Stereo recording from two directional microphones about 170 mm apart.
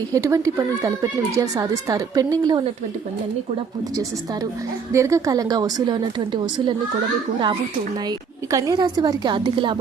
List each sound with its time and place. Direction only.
0.1 s speech: 20° right (ahead or behind)
4.9 s speech: 20° right (ahead or behind)
8.0 s speech: 20° right (ahead or behind)